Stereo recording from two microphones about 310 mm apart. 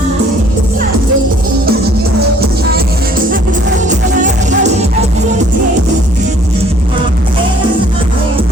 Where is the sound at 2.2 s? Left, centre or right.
Right.